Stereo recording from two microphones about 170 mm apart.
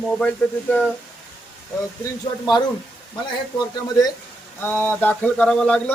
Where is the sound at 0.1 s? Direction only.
5° left (ahead or behind).